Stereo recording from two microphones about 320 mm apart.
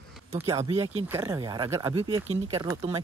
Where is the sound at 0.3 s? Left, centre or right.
Centre.